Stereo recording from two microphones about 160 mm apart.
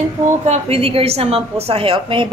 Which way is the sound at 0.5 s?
35° right (ahead or behind).